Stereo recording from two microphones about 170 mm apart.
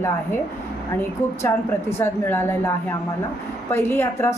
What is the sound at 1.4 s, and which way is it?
A woman's voice, 15° left (ahead or behind).